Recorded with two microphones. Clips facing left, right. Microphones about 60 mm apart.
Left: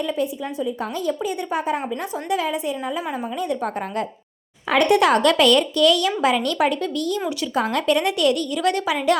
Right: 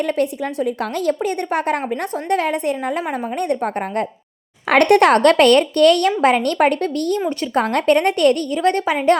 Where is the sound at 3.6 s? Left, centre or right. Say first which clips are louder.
Right 4 dB; right.